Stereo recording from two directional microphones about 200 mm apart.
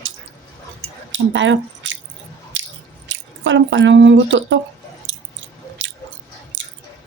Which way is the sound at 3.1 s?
65° right (ahead or behind).